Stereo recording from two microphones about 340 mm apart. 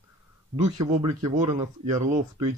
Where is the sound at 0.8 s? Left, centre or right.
Centre.